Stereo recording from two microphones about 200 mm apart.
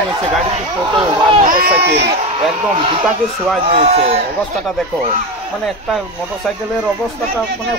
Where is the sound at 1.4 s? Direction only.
45° right (ahead or behind).